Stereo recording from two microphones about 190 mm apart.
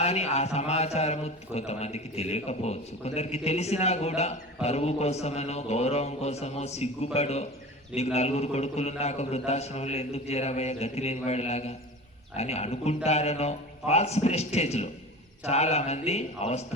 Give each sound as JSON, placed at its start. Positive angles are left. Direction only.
{"t": 0.0, "sound": "a man's voice", "side_deg": 35}